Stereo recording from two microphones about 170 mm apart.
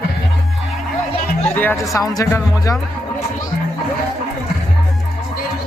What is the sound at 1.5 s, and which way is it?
Speech, 10° left (ahead or behind).